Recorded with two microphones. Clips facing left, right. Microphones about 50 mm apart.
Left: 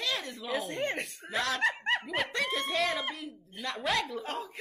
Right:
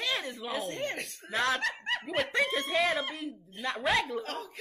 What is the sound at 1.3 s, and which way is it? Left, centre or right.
Speech, centre.